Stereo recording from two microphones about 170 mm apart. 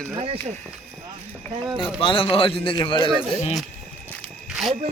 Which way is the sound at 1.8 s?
30° left (ahead or behind).